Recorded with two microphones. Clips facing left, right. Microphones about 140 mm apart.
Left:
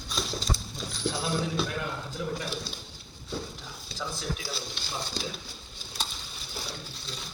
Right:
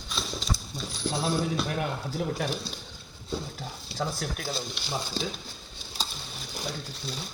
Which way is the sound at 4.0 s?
60° right (ahead or behind).